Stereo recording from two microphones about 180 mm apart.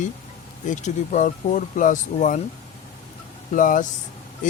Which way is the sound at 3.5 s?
45° left (ahead or behind).